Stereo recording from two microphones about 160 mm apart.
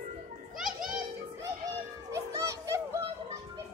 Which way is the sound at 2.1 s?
20° right (ahead or behind).